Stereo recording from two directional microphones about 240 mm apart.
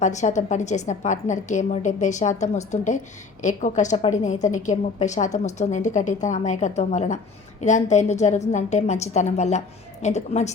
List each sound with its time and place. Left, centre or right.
0.0 s a woman's voice: left